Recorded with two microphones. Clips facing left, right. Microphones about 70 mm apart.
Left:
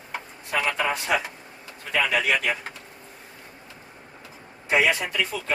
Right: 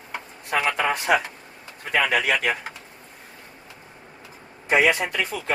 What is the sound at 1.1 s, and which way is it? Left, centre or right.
Speech, right.